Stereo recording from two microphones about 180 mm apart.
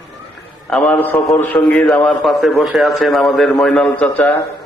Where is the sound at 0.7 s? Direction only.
5° left (ahead or behind).